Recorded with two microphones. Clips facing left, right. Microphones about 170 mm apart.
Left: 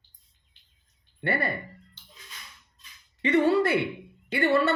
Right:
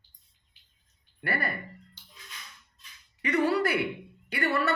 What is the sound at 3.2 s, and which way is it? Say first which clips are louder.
A woman's voice: left 4 dB; 25° left (ahead or behind).